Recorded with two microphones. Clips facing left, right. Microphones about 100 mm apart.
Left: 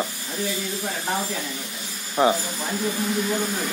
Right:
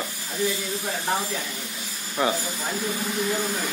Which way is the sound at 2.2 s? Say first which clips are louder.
Left 5 dB; 25° left (ahead or behind).